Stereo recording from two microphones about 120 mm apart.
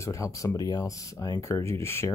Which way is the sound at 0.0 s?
25° left (ahead or behind).